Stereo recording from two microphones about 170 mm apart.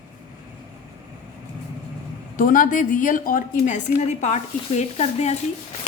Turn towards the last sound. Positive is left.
turn(degrees=40)  # may be behind; listen again after turning